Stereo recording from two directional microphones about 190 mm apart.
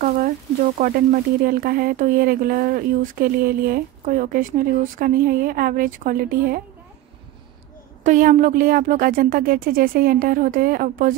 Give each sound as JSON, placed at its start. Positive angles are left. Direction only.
{"t": 0.7, "sound": "speech", "side_deg": -45}
{"t": 8.0, "sound": "speech", "side_deg": -40}